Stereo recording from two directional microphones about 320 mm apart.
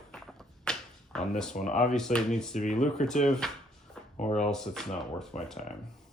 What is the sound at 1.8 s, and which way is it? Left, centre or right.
Speech, centre.